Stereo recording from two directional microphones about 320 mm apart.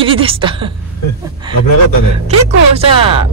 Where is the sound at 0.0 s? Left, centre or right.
Centre.